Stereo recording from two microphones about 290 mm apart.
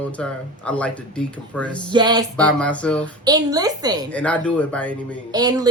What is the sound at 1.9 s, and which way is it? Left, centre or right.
Speech, centre.